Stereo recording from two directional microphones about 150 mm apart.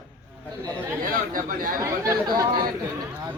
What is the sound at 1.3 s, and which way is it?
Speech, 70° right (ahead or behind).